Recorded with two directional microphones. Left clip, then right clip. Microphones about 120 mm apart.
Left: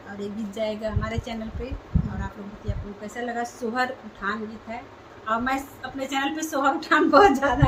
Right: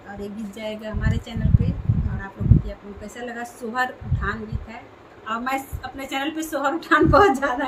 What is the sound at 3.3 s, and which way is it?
A woman's voice, 25° right (ahead or behind).